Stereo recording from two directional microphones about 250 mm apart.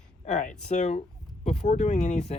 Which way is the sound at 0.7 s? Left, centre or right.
Left.